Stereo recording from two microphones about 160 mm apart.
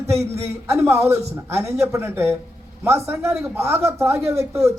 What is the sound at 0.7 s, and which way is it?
Speech, 15° right (ahead or behind).